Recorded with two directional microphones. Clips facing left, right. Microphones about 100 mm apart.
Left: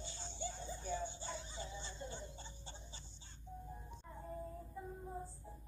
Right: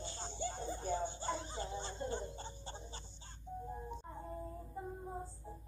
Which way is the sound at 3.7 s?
35° right (ahead or behind).